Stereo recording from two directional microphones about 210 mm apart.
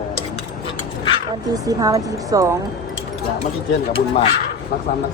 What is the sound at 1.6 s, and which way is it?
Speech, 15° right (ahead or behind).